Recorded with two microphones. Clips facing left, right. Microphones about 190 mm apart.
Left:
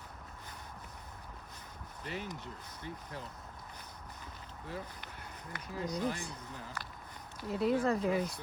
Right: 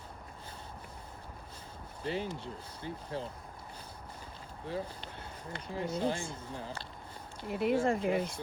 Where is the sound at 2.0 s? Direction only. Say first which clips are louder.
Right 6 dB; 30° right (ahead or behind).